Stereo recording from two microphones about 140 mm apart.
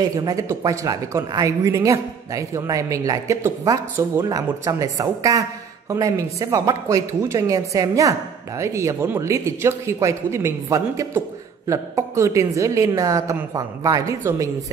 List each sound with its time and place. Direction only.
0.1 s speech: 25° right (ahead or behind)